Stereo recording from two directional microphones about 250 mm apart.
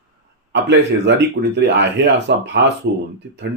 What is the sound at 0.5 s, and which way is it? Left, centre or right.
Speech, right.